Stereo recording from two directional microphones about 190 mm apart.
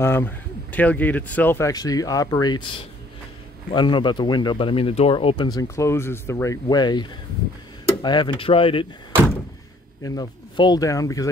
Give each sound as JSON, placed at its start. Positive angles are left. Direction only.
{"t": 0.0, "sound": "speech", "side_deg": 10}
{"t": 10.0, "sound": "speech", "side_deg": 20}